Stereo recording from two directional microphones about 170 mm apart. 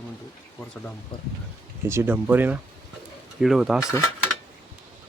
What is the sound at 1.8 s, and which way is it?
Speech, 15° right (ahead or behind).